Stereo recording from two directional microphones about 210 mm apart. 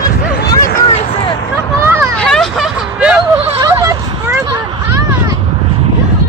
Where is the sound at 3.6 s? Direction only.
15° right (ahead or behind).